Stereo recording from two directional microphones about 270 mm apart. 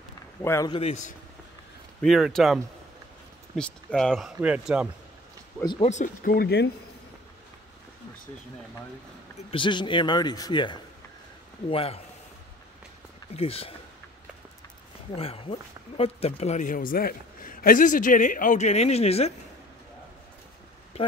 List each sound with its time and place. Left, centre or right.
0.4 s speech: centre
2.0 s speech: centre
5.6 s a man's voice: centre; by 6.7 s left
9.5 s a man's voice: centre
13.4 s a man's voice: left
15.1 s a man's voice: left